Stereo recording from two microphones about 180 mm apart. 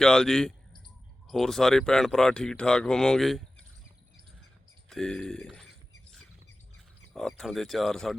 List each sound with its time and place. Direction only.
0.0 s speech: 5° left (ahead or behind)
4.9 s speech: 5° left (ahead or behind)
7.1 s speech: centre (ahead or behind)